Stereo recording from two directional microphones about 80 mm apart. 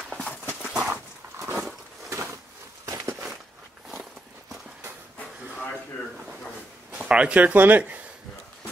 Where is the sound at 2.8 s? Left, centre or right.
Right.